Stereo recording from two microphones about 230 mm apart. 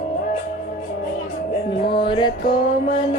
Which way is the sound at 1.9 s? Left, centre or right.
Left.